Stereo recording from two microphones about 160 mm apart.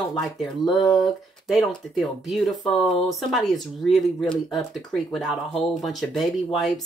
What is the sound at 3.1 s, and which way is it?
Speech, centre (ahead or behind).